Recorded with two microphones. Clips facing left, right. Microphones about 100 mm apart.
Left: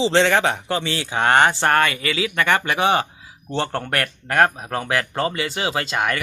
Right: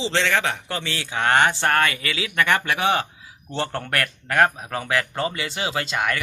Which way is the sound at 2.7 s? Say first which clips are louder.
Left 3 dB; 25° left (ahead or behind).